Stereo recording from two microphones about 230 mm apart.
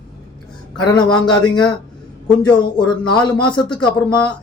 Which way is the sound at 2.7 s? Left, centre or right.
Centre.